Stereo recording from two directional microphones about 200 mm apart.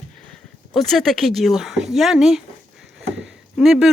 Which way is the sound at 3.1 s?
Centre (ahead or behind).